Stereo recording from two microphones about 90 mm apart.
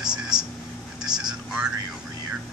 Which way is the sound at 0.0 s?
10° right (ahead or behind).